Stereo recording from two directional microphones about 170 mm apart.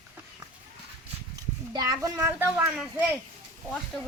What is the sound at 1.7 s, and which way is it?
A child's voice, 20° right (ahead or behind).